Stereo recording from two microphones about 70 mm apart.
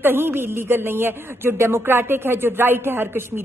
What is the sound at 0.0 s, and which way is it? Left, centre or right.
Speech, right.